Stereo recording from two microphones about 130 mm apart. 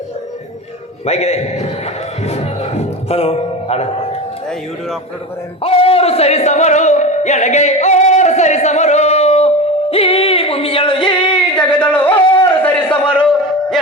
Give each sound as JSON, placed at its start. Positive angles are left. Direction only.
{"t": 1.0, "sound": "a man's voice", "side_deg": 55}
{"t": 5.6, "sound": "music", "side_deg": 45}
{"t": 9.9, "sound": "yodeling", "side_deg": 50}
{"t": 11.5, "sound": "a sound", "side_deg": 10}